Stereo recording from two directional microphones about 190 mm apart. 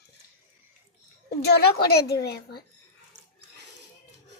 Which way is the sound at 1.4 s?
60° left (ahead or behind).